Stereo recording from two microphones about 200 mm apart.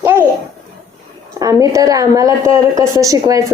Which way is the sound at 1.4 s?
15° right (ahead or behind).